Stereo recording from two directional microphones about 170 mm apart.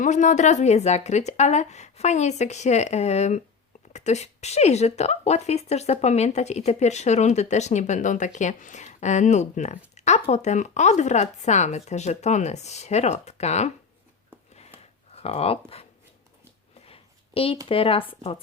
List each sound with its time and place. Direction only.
0.0 s speech: 45° left (ahead or behind)
15.1 s speech: 35° left (ahead or behind)
16.8 s a sound: 35° left (ahead or behind)
17.7 s speech: 35° left (ahead or behind)